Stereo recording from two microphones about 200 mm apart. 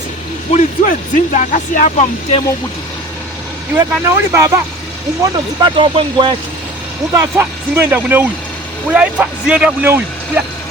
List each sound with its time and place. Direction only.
0.5 s speech: 40° left (ahead or behind)
3.8 s speech: 10° right (ahead or behind)
7.1 s speech: 10° right (ahead or behind)